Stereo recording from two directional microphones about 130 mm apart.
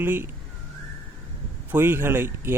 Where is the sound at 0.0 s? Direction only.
15° right (ahead or behind).